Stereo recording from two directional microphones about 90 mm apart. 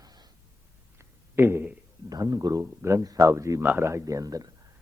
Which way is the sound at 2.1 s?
40° right (ahead or behind).